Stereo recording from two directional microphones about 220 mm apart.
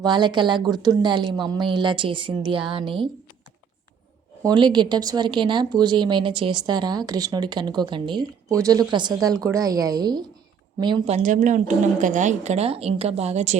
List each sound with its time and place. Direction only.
0.0 s speech: 20° right (ahead or behind)
4.4 s a woman's voice: 20° right (ahead or behind)